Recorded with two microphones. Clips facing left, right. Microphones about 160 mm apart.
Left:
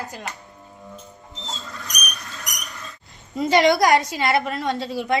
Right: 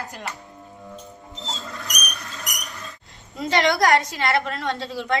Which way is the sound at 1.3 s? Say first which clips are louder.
Right 1 dB; centre (ahead or behind).